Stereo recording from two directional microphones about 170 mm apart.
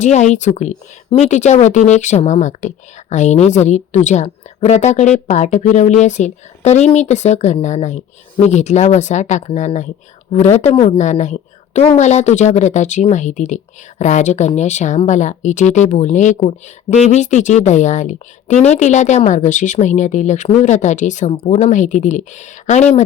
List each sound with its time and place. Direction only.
0.0 s speech: 45° left (ahead or behind)